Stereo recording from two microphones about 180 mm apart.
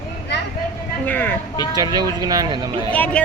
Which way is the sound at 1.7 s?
20° right (ahead or behind).